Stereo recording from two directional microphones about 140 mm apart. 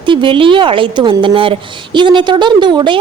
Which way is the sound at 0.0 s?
35° right (ahead or behind).